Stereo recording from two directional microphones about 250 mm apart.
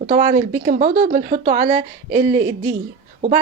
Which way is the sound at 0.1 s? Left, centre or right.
Right.